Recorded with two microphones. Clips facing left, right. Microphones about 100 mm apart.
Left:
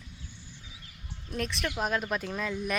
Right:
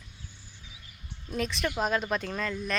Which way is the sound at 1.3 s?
Centre (ahead or behind).